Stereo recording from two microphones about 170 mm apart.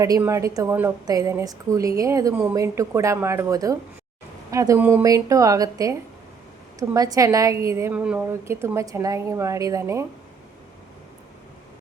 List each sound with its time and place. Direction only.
0.0 s a woman's voice: 20° right (ahead or behind)